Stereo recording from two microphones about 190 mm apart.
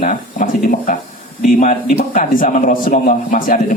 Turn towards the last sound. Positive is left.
turn(degrees=40)  # may be behind; listen again after turning